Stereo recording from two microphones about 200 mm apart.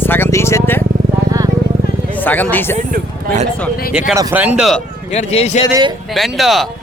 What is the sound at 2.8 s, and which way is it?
Speech, 40° right (ahead or behind).